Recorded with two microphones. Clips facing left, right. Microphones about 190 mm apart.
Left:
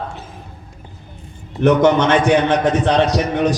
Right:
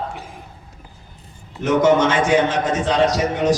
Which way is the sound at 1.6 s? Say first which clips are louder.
Left 2 dB; 60° left (ahead or behind).